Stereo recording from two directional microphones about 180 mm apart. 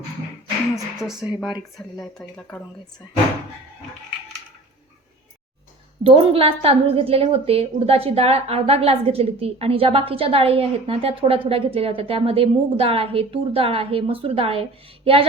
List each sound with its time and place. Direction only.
0.9 s speech: 5° right (ahead or behind)
6.0 s a woman's voice: 30° right (ahead or behind)